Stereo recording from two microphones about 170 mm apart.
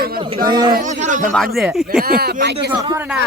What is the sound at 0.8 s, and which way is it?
Speech, 45° right (ahead or behind).